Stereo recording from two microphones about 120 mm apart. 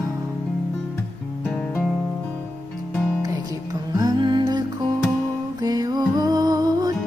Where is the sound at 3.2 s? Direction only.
30° right (ahead or behind).